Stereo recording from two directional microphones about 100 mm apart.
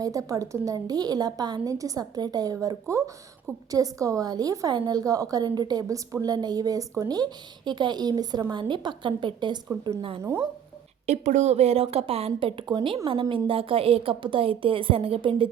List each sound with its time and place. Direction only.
0.0 s a woman's voice: 35° right (ahead or behind); by 9.6 s 50° right (ahead or behind)
10.2 s speech: 30° right (ahead or behind)
11.1 s a woman's voice: 90° right; by 15.4 s 60° right (ahead or behind)